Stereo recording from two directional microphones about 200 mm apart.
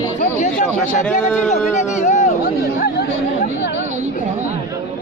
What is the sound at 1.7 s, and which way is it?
Speech, 35° left (ahead or behind).